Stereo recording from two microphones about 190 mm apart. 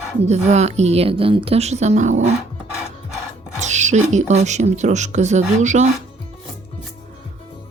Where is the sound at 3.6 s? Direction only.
40° right (ahead or behind).